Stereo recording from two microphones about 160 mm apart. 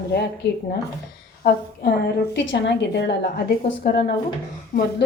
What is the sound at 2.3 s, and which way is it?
A woman's voice, 90° left.